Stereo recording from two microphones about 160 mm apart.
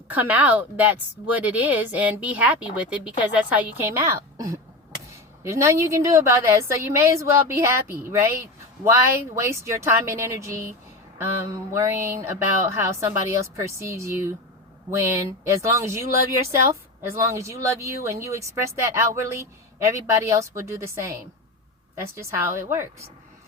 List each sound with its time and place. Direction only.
0.1 s a woman's voice: 10° right (ahead or behind)
11.7 s a woman's voice: 15° right (ahead or behind)
17.1 s speech: 20° right (ahead or behind)
22.2 s a woman's voice: 15° right (ahead or behind)